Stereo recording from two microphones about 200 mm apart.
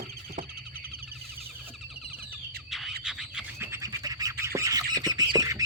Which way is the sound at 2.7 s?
Centre (ahead or behind).